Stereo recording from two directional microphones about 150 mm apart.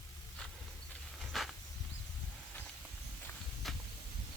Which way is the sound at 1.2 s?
Centre (ahead or behind).